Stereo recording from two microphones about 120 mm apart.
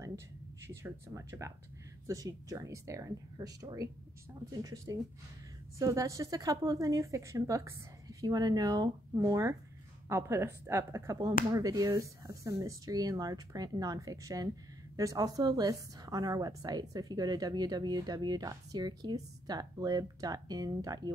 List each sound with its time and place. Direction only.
0.7 s a woman's voice: 20° right (ahead or behind)